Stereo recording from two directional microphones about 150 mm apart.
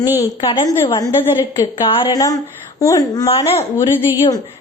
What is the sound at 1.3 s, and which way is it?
Speech, 30° left (ahead or behind).